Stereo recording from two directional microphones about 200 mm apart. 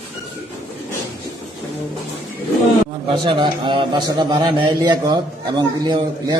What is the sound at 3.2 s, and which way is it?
A man's voice, 25° right (ahead or behind).